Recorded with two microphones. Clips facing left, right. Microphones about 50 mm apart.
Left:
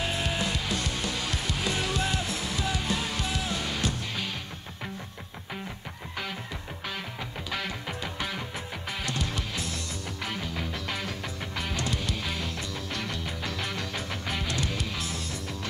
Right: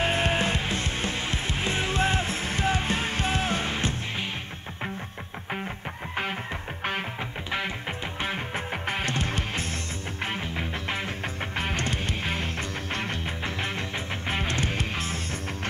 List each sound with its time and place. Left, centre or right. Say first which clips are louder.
0.0 s music: right 5 dB; right
8.2 s music: right 4 dB; right